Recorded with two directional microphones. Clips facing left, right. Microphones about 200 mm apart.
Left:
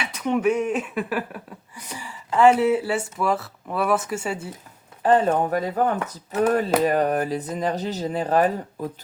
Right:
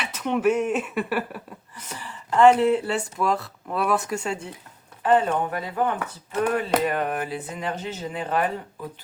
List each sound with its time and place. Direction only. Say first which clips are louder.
0.0 s speech: left 1 dB; centre (ahead or behind)
1.7 s speech: left 1 dB; 10° left (ahead or behind)
5.0 s speech: left 2 dB; 40° left (ahead or behind)